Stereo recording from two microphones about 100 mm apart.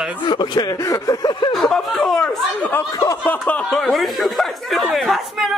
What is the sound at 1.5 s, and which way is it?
Speech, 5° left (ahead or behind).